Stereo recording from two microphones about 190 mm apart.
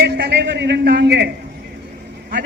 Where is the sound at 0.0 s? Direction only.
60° right (ahead or behind).